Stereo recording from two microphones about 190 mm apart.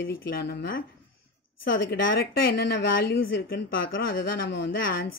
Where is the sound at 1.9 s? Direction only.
50° left (ahead or behind).